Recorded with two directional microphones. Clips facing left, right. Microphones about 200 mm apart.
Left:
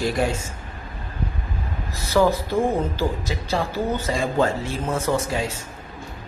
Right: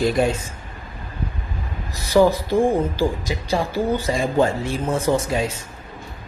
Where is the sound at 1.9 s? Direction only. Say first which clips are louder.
Right 3 dB; 15° right (ahead or behind).